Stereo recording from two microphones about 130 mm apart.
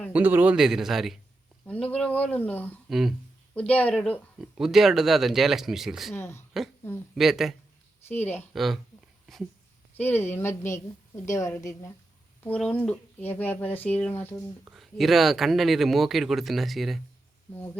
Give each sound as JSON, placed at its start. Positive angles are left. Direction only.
{"t": 0.1, "sound": "speech", "side_deg": -15}
{"t": 1.6, "sound": "speech", "side_deg": 10}
{"t": 2.9, "sound": "speech", "side_deg": 0}
{"t": 3.5, "sound": "speech", "side_deg": 10}
{"t": 4.4, "sound": "speech", "side_deg": -5}
{"t": 6.1, "sound": "a woman's voice", "side_deg": 20}
{"t": 7.2, "sound": "speech", "side_deg": 0}
{"t": 8.0, "sound": "speech", "side_deg": 15}
{"t": 8.5, "sound": "speech", "side_deg": 0}
{"t": 10.0, "sound": "a woman's voice", "side_deg": 15}
{"t": 12.5, "sound": "speech", "side_deg": 10}
{"t": 14.7, "sound": "speech", "side_deg": 0}